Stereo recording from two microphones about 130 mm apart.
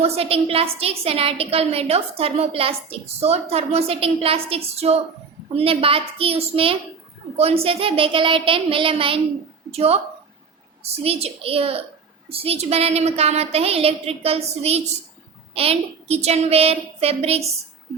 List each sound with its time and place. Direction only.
0.0 s a woman's voice: 50° right (ahead or behind)
11.0 s a woman's voice: 50° right (ahead or behind)